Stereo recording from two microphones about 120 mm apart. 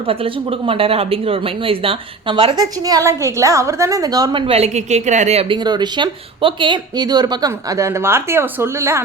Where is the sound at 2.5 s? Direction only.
30° right (ahead or behind).